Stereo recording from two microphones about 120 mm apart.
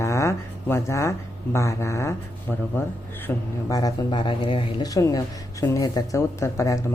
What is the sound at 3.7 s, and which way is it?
Speech, 35° left (ahead or behind).